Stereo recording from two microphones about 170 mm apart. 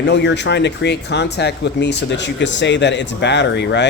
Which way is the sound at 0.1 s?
90° left.